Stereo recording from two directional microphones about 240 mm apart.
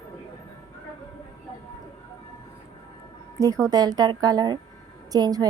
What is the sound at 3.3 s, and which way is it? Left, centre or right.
A woman's voice, centre.